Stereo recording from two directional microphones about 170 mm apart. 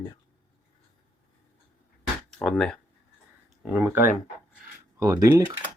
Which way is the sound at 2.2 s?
5° left (ahead or behind).